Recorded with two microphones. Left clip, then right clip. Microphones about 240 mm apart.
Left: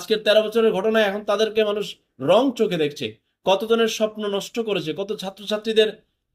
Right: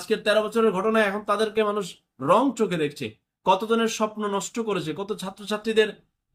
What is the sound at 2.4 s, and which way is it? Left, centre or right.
A man's voice, centre.